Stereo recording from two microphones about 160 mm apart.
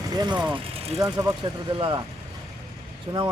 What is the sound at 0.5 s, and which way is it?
Vehicle, 40° right (ahead or behind).